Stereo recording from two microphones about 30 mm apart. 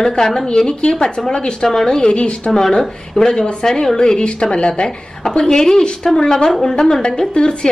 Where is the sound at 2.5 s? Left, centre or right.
Centre.